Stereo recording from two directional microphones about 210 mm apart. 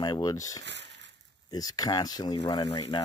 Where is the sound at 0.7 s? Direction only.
55° right (ahead or behind).